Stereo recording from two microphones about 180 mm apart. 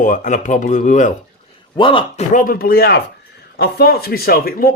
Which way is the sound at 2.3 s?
50° left (ahead or behind).